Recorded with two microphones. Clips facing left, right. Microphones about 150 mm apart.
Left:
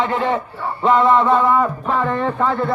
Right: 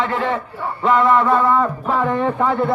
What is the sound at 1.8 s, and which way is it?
Speech, 5° right (ahead or behind).